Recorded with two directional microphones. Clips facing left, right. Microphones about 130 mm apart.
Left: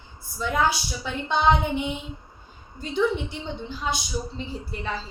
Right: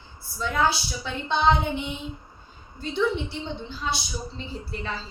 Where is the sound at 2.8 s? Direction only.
10° left (ahead or behind).